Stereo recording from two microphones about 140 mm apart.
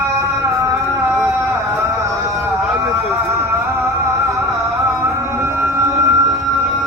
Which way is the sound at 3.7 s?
15° right (ahead or behind).